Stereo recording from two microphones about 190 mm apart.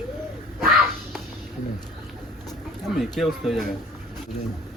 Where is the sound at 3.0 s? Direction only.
Centre (ahead or behind).